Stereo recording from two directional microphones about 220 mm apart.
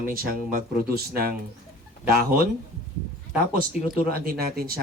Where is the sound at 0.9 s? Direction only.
45° right (ahead or behind).